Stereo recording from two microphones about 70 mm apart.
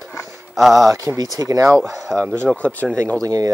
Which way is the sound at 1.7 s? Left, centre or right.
Centre.